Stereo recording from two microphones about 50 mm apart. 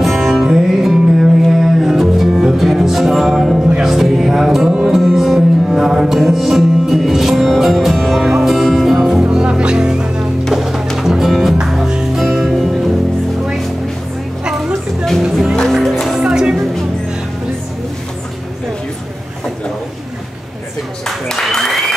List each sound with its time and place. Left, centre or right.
0.0 s music: centre
9.3 s music: centre
14.4 s a sound: centre
15.7 s music: centre
16.1 s music: centre
21.3 s applause: centre